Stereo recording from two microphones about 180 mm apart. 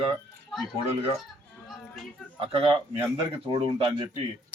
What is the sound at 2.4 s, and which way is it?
Speech, 30° right (ahead or behind).